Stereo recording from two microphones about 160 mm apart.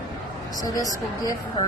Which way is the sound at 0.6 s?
20° left (ahead or behind).